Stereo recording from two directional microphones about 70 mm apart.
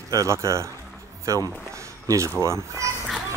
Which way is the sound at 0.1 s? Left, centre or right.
Right.